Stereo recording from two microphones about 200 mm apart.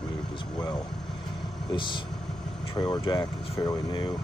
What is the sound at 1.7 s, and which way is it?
Speech, 25° left (ahead or behind).